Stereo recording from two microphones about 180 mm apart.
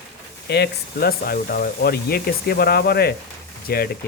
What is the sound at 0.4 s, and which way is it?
Speech, 65° left (ahead or behind).